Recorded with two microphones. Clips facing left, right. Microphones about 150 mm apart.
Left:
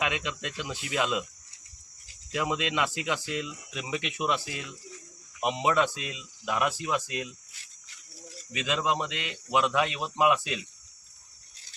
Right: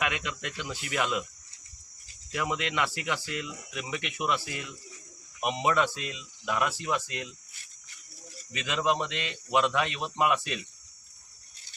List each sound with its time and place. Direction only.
0.0 s speech: 20° left (ahead or behind)
2.3 s speech: 15° left (ahead or behind)
8.5 s speech: 15° left (ahead or behind)